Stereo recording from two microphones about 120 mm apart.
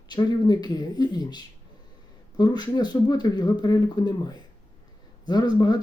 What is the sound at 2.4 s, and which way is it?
Speech, 35° left (ahead or behind).